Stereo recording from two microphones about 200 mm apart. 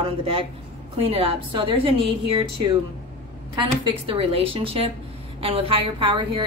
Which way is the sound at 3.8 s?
25° right (ahead or behind).